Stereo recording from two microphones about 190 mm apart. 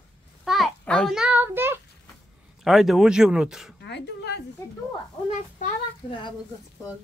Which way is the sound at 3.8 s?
65° left (ahead or behind).